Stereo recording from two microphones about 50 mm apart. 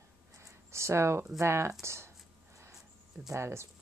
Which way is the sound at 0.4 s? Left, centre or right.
Right.